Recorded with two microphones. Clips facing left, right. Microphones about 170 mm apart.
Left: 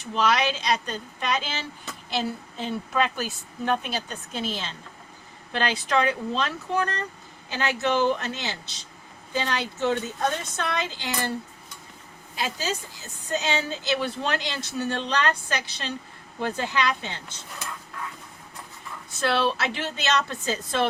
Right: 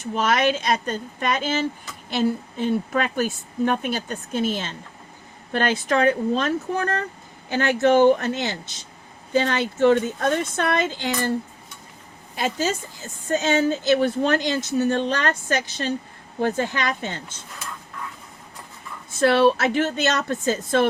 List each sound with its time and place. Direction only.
0.2 s a woman's voice: 50° right (ahead or behind)
13.3 s a woman's voice: 50° right (ahead or behind)
19.2 s a woman's voice: 50° right (ahead or behind)